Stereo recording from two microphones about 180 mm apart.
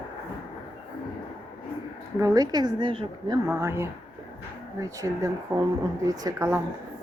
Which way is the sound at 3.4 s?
15° right (ahead or behind).